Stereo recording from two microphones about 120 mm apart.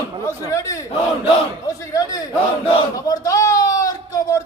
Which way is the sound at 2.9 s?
30° left (ahead or behind).